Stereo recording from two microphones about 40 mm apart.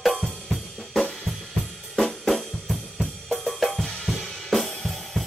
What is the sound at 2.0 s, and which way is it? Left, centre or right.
Drum kit, centre.